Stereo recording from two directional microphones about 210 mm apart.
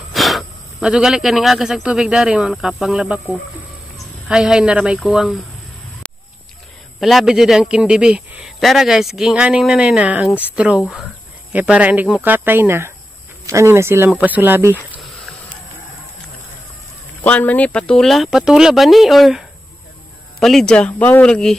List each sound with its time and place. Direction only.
0.1 s speech: centre (ahead or behind)
4.3 s a man's voice: 5° right (ahead or behind)
7.0 s a man's voice: centre (ahead or behind)
17.2 s a man's voice: 5° left (ahead or behind)